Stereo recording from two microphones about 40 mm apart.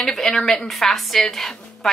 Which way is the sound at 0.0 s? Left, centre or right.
Centre.